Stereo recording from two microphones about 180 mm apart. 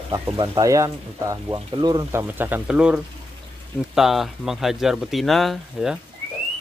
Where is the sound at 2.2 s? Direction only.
10° right (ahead or behind).